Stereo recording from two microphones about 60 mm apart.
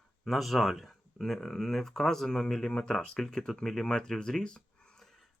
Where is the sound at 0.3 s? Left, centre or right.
Centre.